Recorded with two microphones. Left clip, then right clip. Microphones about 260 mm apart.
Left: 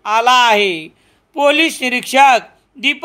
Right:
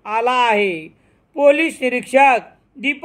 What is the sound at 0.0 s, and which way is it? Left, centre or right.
Speech, left.